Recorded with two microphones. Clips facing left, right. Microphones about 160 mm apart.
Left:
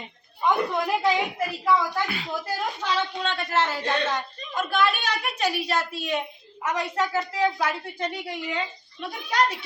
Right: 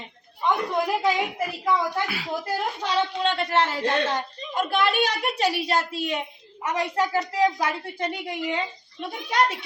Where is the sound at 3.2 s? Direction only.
30° right (ahead or behind).